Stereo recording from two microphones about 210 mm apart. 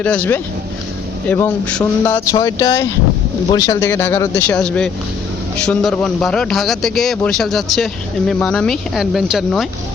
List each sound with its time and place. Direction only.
0.0 s speech: 5° left (ahead or behind)